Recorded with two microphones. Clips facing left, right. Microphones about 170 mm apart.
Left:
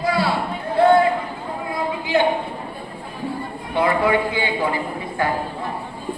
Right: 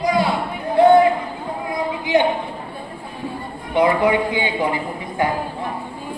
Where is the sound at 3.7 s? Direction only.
20° right (ahead or behind).